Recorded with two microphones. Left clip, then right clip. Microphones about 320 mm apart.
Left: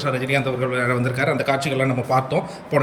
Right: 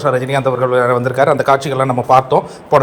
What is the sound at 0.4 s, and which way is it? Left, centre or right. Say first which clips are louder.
Speech: right 9 dB; right.